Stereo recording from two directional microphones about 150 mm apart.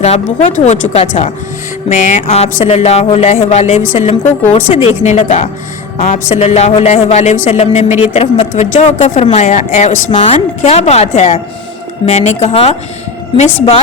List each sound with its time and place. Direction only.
0.0 s speech: 50° left (ahead or behind)
4.7 s speech: 40° left (ahead or behind)
5.0 s speech: 50° left (ahead or behind)
7.9 s speech: 15° right (ahead or behind)
8.1 s speech: 45° left (ahead or behind)
8.7 s speech: 55° left (ahead or behind)
9.0 s speech: 40° left (ahead or behind)
10.1 s speech: 40° left (ahead or behind)